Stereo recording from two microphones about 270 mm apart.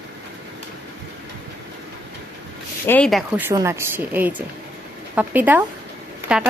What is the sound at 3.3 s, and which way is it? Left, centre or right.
Speech, centre.